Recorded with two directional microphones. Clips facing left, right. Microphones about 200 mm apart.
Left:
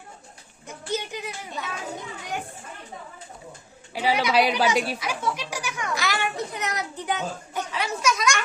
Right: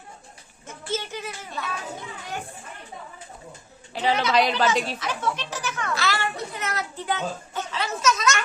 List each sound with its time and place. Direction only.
0.7 s speech: 15° left (ahead or behind)
3.9 s speech: 10° left (ahead or behind)